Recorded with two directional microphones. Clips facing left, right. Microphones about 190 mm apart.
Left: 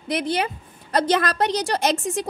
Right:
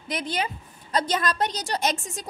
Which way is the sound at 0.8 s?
65° left (ahead or behind).